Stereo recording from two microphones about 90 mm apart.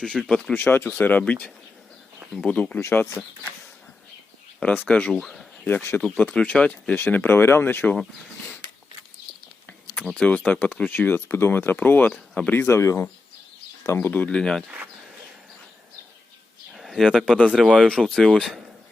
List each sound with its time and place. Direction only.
0.3 s speech: 5° left (ahead or behind)
0.5 s speech: 25° left (ahead or behind)
4.6 s speech: 15° left (ahead or behind)
5.1 s speech: centre (ahead or behind)
5.6 s speech: 25° left (ahead or behind)
6.1 s speech: 15° left (ahead or behind)
10.2 s speech: 10° left (ahead or behind)
12.5 s speech: 30° left (ahead or behind)
14.3 s speech: 10° left (ahead or behind)
16.7 s a sound: centre (ahead or behind)
17.5 s speech: centre (ahead or behind)